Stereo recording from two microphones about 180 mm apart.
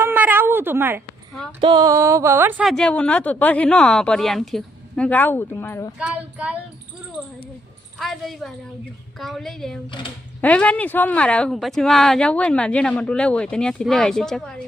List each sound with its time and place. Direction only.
0.0 s a sound: 10° right (ahead or behind)
1.6 s speech: 20° right (ahead or behind)
2.6 s speech: 5° left (ahead or behind)
6.0 s speech: 5° right (ahead or behind)
7.9 s speech: centre (ahead or behind)